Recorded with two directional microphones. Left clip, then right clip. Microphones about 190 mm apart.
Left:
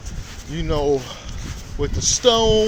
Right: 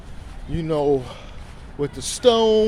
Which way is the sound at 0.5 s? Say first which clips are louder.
Even; 30° right (ahead or behind).